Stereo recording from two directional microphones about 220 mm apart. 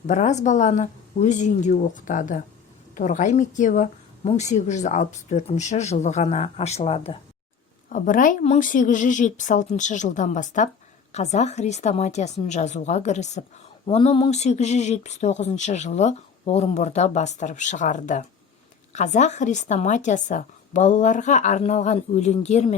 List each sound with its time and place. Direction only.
0.1 s speech: 30° left (ahead or behind)
7.9 s speech: 35° left (ahead or behind)